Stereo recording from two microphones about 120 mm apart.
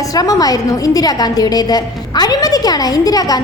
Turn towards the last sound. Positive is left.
turn(degrees=30)  # may be behind; listen again after turning